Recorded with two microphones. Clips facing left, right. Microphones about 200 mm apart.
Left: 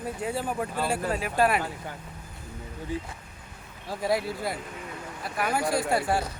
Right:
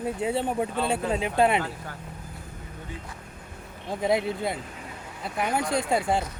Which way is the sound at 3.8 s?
20° right (ahead or behind).